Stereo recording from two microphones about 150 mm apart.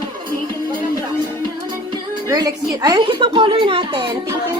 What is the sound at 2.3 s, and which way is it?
Speech, 25° right (ahead or behind).